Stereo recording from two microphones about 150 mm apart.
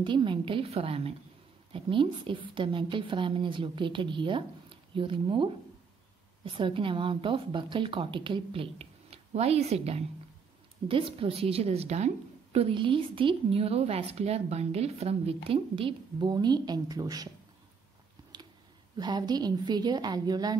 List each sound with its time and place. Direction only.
0.0 s speech: 35° right (ahead or behind)
18.9 s a woman's voice: 25° right (ahead or behind)